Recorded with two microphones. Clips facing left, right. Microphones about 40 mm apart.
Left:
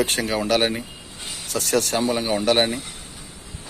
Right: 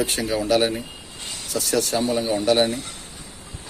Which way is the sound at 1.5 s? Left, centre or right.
Left.